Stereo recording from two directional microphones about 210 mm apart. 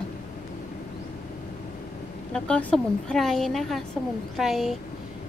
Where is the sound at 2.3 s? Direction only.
5° left (ahead or behind).